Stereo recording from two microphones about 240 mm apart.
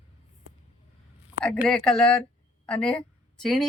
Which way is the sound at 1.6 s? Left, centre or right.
Centre.